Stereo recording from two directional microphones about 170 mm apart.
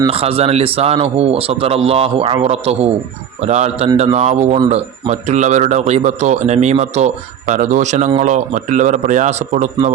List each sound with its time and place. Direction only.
0.1 s a man's voice: 35° right (ahead or behind)